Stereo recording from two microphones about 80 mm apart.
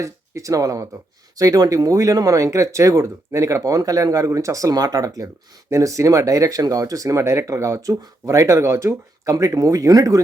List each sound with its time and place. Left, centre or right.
0.0 s speech: right
9.3 s speech: right